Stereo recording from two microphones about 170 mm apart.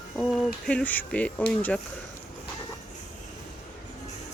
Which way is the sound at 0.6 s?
10° left (ahead or behind).